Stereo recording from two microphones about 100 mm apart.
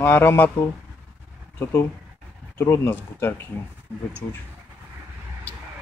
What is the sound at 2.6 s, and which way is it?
Speech, 25° left (ahead or behind).